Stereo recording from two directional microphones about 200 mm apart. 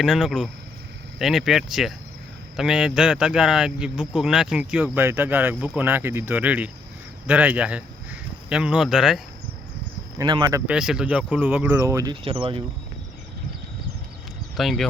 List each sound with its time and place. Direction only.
0.0 s speech: centre (ahead or behind)
10.2 s speech: 20° right (ahead or behind)
10.7 s speech: 5° right (ahead or behind)
12.2 s speech: 30° right (ahead or behind)
14.5 s speech: centre (ahead or behind)